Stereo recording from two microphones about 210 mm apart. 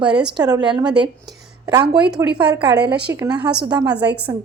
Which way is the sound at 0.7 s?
5° right (ahead or behind).